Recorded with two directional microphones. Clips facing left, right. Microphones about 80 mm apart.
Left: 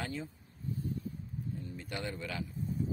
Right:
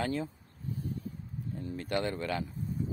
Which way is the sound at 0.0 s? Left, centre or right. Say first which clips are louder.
Right 7 dB; right.